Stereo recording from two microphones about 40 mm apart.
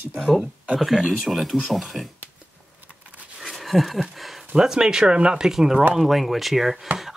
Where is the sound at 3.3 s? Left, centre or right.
Centre.